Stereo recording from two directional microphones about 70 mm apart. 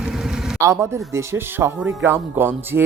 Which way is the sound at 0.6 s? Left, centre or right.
Right.